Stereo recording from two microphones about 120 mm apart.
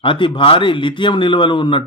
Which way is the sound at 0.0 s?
45° left (ahead or behind).